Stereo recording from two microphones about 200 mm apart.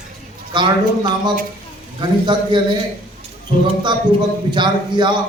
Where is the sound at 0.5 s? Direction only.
20° right (ahead or behind).